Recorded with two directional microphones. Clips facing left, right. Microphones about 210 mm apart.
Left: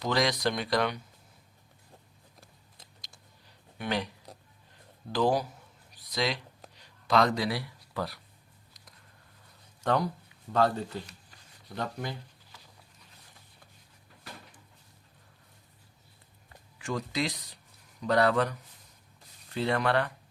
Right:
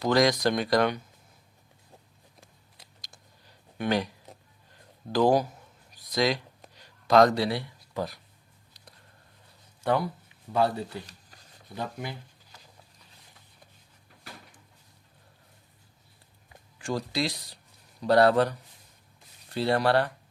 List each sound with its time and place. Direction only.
0.0 s speech: 45° right (ahead or behind)
3.8 s speech: 45° right (ahead or behind)
5.1 s speech: 45° right (ahead or behind)
7.4 s speech: 25° right (ahead or behind)
9.8 s speech: 10° right (ahead or behind)
16.8 s speech: 35° right (ahead or behind)
19.5 s speech: 35° right (ahead or behind)